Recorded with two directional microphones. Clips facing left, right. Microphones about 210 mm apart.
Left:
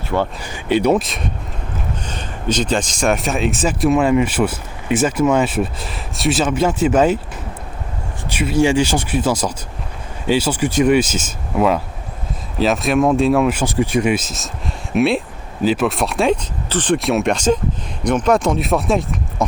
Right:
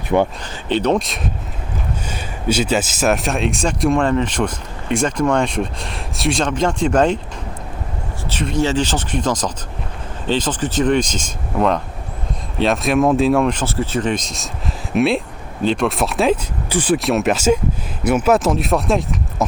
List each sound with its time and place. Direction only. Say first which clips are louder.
0.1 s speech: right 4 dB; 20° right (ahead or behind)
0.4 s speech: left 2 dB; 10° left (ahead or behind)
8.3 s speech: left 3 dB; 10° left (ahead or behind)